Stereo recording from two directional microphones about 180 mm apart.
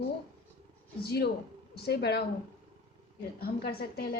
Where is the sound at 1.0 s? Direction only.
65° left (ahead or behind).